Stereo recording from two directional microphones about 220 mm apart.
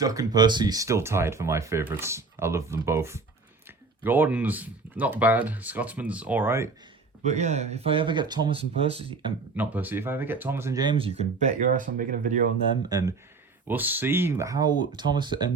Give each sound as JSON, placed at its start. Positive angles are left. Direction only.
{"t": 0.0, "sound": "speech", "side_deg": -15}
{"t": 7.3, "sound": "speech", "side_deg": -30}
{"t": 9.6, "sound": "speech", "side_deg": -10}
{"t": 12.9, "sound": "speech", "side_deg": -15}